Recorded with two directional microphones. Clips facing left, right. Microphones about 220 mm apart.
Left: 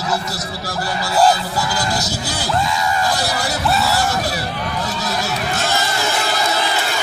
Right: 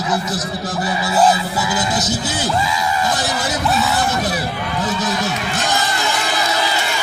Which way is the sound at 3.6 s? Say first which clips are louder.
Even; centre (ahead or behind).